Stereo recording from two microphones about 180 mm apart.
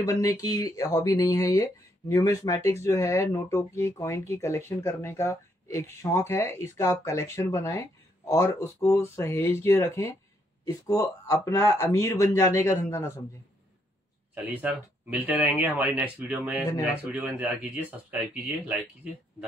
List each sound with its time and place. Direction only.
0.0 s speech: 15° left (ahead or behind)
14.3 s speech: 10° right (ahead or behind)